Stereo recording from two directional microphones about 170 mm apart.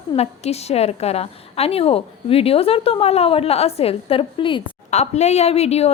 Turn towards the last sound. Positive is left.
turn(degrees=40)  # may be behind; listen again after turning